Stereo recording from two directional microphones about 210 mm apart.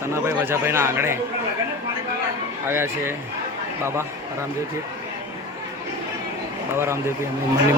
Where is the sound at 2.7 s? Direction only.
10° right (ahead or behind).